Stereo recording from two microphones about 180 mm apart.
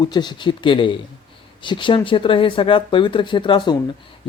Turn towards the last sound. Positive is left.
turn(degrees=25)  # may be behind; listen again after turning